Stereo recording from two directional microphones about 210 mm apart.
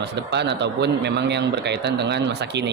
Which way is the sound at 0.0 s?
55° right (ahead or behind).